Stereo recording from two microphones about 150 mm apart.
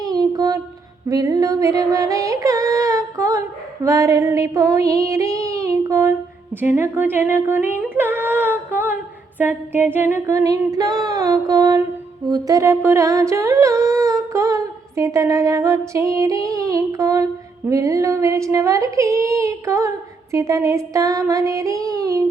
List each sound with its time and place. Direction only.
0.0 s a sound: 25° right (ahead or behind)
1.0 s music: 25° right (ahead or behind)
3.8 s female singing: 20° right (ahead or behind)
9.4 s humming: 15° right (ahead or behind)